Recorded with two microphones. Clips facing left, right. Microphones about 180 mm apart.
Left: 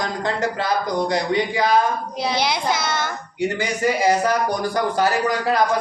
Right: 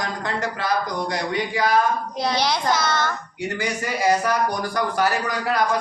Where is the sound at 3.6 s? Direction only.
25° left (ahead or behind).